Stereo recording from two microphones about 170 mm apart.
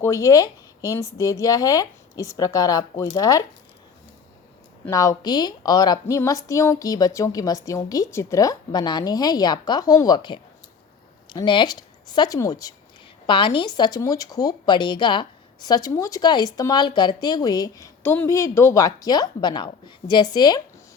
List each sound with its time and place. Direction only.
0.0 s speech: 20° left (ahead or behind)
4.9 s a woman's voice: 20° left (ahead or behind)